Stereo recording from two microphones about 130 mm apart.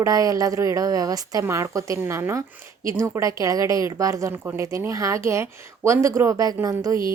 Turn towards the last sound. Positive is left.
turn(degrees=-25)  # may be behind; listen again after turning